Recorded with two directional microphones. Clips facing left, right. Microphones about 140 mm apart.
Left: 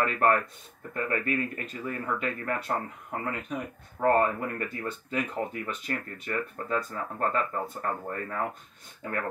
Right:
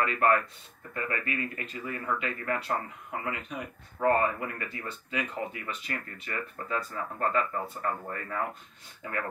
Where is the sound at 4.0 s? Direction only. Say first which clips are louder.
Left 2 dB; 40° left (ahead or behind).